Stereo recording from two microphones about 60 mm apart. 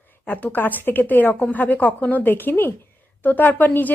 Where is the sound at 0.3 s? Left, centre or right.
Left.